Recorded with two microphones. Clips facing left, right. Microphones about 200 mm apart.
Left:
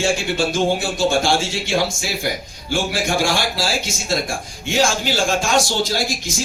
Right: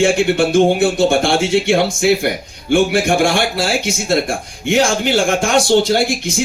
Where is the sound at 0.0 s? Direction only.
60° right (ahead or behind).